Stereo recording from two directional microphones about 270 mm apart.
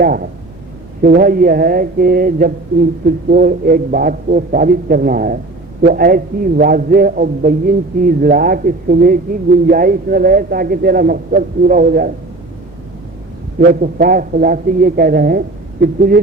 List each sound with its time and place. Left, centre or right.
0.0 s a man's voice: right
13.6 s a man's voice: right